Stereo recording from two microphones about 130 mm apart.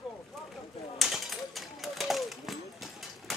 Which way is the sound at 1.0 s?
Centre (ahead or behind).